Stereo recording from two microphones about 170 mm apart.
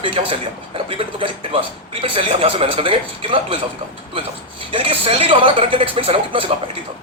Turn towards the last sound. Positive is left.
turn(degrees=-35)  # may be behind; listen again after turning